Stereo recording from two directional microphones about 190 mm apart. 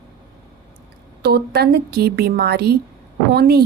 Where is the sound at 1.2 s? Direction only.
60° right (ahead or behind).